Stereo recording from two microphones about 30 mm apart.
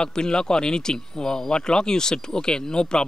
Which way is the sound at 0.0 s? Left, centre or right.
Left.